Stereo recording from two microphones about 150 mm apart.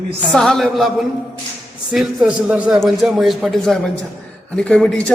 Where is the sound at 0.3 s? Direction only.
5° left (ahead or behind).